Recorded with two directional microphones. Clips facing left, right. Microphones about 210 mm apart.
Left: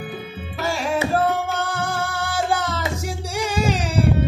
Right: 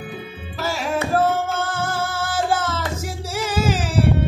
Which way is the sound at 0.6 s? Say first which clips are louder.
Left 1 dB; centre (ahead or behind).